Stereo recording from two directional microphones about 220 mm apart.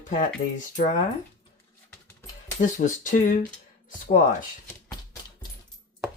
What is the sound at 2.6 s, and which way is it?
Speech, 35° left (ahead or behind).